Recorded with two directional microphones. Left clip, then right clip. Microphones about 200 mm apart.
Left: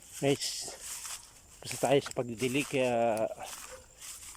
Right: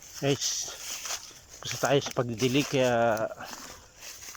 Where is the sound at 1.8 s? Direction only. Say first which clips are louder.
Right 2 dB; 20° left (ahead or behind).